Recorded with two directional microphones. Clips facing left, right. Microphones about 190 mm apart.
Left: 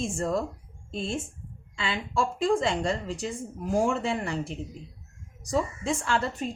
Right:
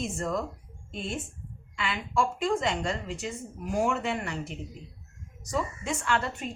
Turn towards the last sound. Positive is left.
turn(degrees=30)  # may be behind; listen again after turning